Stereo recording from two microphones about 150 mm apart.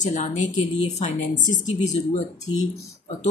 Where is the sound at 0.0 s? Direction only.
55° left (ahead or behind).